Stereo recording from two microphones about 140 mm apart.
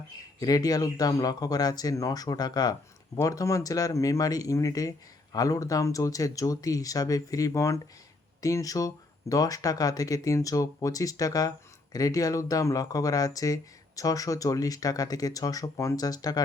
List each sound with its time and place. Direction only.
0.3 s speech: 25° left (ahead or behind)